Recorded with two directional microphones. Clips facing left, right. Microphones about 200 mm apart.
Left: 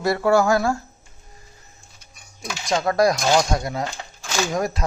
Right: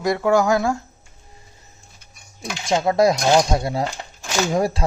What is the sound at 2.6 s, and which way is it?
Speech, 25° right (ahead or behind).